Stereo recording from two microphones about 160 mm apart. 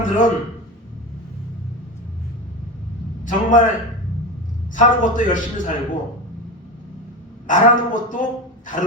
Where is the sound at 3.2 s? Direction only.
55° left (ahead or behind).